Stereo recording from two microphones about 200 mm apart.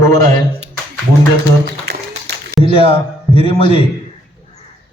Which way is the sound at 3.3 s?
30° left (ahead or behind).